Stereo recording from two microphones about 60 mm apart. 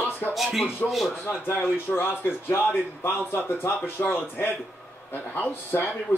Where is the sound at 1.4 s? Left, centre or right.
Left.